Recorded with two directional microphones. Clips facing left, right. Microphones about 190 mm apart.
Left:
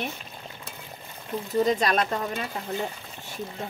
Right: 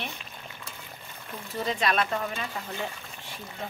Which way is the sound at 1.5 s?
40° left (ahead or behind).